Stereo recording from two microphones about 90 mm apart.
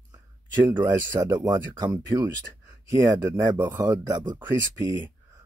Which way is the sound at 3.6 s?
40° right (ahead or behind).